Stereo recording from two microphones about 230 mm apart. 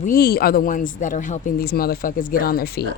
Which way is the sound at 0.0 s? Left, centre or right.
Left.